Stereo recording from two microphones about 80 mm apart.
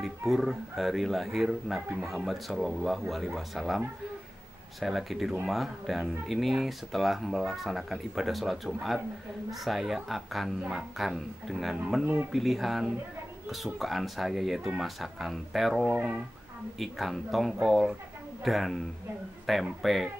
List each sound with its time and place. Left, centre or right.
0.0 s speech: centre